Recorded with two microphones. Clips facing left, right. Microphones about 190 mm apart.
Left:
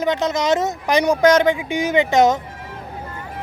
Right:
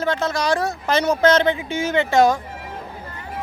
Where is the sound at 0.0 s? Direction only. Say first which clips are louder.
Left 2 dB; 20° left (ahead or behind).